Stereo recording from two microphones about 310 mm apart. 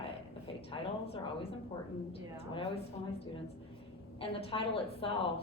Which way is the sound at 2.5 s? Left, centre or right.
Centre.